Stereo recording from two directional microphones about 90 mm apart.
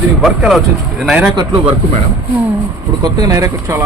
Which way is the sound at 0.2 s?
Centre (ahead or behind).